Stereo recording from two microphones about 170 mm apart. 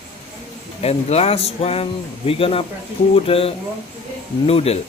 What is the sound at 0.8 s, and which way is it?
Speech, 35° left (ahead or behind).